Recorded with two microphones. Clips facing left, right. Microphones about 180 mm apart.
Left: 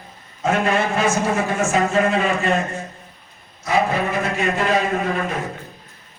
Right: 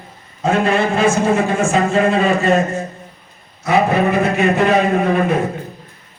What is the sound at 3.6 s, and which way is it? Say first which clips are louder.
A man's voice: right 5 dB; 65° right (ahead or behind).